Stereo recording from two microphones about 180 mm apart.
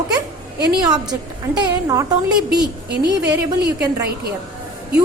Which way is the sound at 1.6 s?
20° right (ahead or behind).